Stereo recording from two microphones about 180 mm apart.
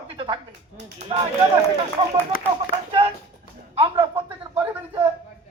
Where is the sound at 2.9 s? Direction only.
35° right (ahead or behind).